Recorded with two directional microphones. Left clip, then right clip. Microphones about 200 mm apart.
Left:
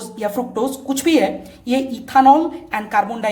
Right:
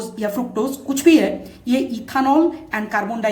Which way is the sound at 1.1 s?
45° left (ahead or behind).